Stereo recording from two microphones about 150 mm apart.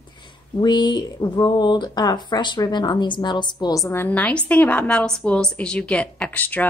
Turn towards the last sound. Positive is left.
turn(degrees=10)  # may be behind; listen again after turning